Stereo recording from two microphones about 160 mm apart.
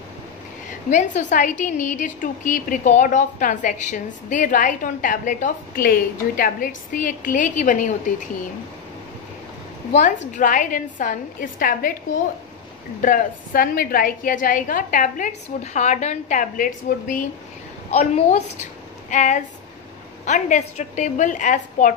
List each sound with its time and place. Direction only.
0.8 s a woman's voice: 50° left (ahead or behind)
10.3 s a woman's voice: 55° left (ahead or behind)
13.0 s a woman's voice: 55° left (ahead or behind)
17.9 s a woman's voice: 45° left (ahead or behind)